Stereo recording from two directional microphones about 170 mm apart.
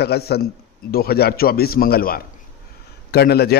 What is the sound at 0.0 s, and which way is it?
Speech, 70° left (ahead or behind).